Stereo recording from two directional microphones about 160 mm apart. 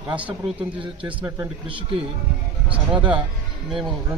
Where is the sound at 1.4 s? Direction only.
30° right (ahead or behind).